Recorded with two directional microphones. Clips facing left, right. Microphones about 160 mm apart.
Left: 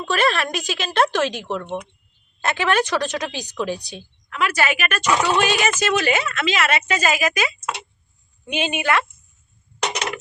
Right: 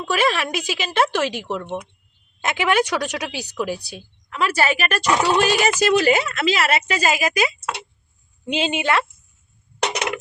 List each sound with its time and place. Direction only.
0.0 s a woman's voice: 10° right (ahead or behind)
4.3 s a woman's voice: 35° right (ahead or behind)
8.5 s a woman's voice: 30° right (ahead or behind)